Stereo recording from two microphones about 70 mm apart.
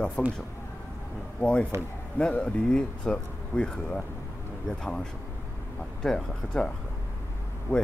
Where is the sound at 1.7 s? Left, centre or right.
Right.